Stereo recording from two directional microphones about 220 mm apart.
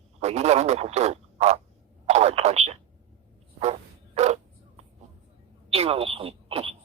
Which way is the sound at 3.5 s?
30° right (ahead or behind).